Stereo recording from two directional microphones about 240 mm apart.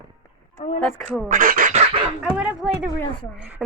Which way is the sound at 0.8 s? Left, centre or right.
Centre.